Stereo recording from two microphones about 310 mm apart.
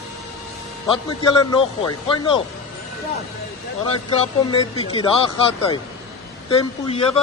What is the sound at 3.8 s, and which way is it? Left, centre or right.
Speech, centre.